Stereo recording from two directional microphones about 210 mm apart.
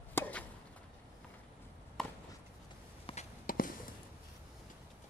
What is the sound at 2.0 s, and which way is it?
Chop, centre (ahead or behind).